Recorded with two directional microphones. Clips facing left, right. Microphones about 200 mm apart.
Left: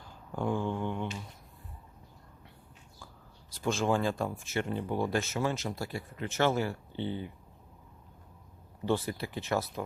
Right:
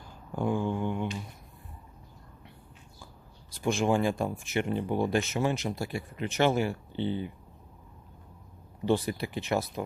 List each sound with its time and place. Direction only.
0.0 s a sound: 10° right (ahead or behind)
3.6 s speech: 15° right (ahead or behind)
8.9 s speech: 15° right (ahead or behind)